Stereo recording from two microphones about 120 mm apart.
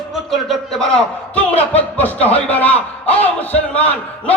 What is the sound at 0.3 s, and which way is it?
A man's voice, 5° left (ahead or behind).